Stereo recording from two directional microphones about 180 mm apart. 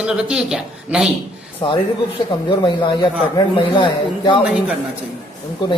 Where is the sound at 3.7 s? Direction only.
25° left (ahead or behind).